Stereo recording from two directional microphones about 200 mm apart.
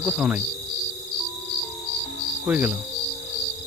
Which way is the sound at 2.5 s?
10° right (ahead or behind).